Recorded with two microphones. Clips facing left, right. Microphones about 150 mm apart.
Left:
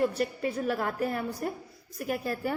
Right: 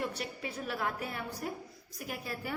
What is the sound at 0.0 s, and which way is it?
A woman's voice, 50° left (ahead or behind).